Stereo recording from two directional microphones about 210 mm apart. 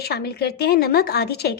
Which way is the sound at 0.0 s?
50° left (ahead or behind).